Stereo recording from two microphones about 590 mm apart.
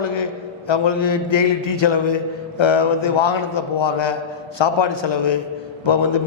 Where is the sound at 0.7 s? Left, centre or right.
Left.